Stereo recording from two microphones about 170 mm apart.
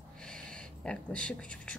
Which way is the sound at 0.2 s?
5° left (ahead or behind).